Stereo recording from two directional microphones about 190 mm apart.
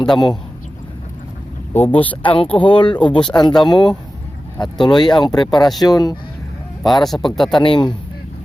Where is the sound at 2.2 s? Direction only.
25° left (ahead or behind).